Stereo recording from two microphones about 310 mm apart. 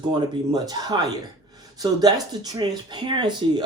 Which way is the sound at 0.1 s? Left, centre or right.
Centre.